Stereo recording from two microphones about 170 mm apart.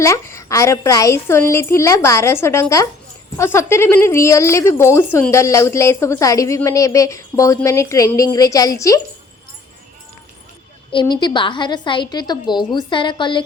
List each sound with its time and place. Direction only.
0.0 s a woman's voice: 15° left (ahead or behind)
11.0 s a woman's voice: 25° left (ahead or behind)